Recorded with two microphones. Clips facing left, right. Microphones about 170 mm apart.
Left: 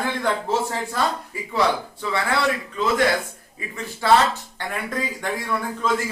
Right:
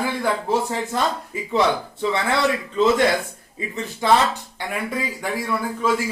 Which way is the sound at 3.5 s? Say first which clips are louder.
Right 4 dB; 20° right (ahead or behind).